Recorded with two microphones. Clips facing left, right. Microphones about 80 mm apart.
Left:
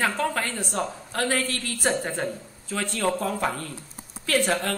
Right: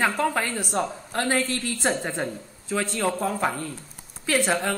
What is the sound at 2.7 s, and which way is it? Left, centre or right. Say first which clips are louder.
A woman's voice: right 1 dB; centre.